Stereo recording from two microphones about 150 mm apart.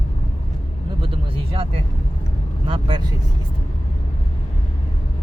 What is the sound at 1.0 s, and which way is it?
Speech, 40° right (ahead or behind).